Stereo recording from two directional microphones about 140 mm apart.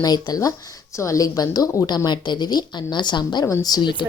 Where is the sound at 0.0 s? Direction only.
30° left (ahead or behind).